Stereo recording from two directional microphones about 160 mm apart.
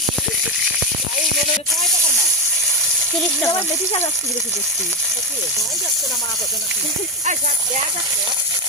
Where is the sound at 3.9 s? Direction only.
40° left (ahead or behind).